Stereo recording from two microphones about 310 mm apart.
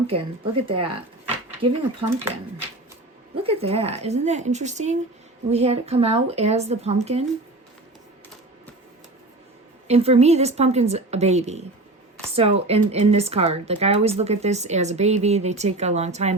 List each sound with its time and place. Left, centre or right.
0.1 s speech: centre
2.0 s speech: centre
3.4 s speech: centre
9.8 s speech: centre